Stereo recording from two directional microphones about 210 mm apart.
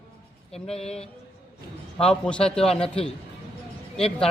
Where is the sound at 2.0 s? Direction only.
5° left (ahead or behind).